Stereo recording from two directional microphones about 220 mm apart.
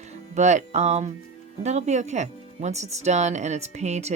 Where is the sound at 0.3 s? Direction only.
30° right (ahead or behind).